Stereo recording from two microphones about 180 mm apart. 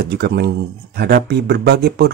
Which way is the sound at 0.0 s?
65° right (ahead or behind).